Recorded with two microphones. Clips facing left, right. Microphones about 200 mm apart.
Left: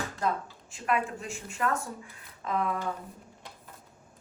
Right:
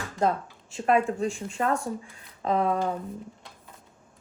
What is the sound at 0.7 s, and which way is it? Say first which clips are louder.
Speech: right 7 dB; 25° right (ahead or behind).